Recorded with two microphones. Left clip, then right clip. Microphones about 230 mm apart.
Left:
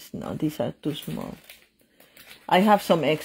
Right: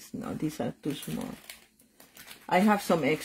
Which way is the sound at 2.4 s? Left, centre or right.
Left.